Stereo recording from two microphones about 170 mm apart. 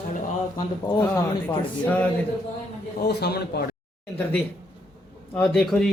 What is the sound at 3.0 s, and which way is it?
Speech, 70° left (ahead or behind).